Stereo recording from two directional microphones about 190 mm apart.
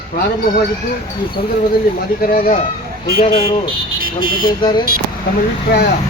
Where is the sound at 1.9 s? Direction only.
50° left (ahead or behind).